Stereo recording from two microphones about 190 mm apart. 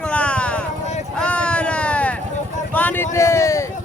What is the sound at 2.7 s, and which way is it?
Speech, 10° left (ahead or behind).